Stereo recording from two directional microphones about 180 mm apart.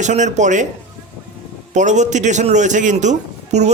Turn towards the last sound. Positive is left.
turn(degrees=-40)  # may be behind; listen again after turning